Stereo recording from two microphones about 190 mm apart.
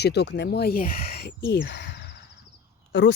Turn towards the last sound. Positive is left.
turn(degrees=70)  # may be behind; listen again after turning